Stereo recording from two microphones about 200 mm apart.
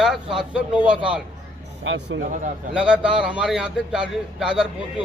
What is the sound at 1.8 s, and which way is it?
Speech, 70° right (ahead or behind).